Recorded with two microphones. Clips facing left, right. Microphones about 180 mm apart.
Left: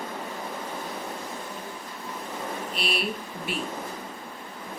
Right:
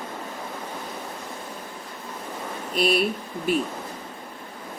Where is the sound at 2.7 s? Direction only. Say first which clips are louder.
Right 11 dB; 45° right (ahead or behind).